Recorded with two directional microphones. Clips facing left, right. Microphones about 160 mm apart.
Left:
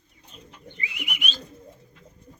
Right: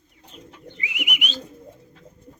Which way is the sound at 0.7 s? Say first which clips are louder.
Right 4 dB; 15° right (ahead or behind).